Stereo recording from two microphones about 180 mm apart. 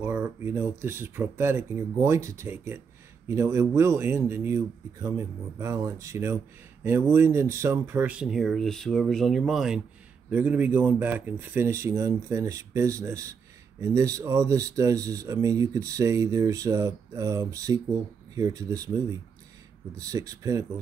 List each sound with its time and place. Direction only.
0.0 s speech: 15° right (ahead or behind)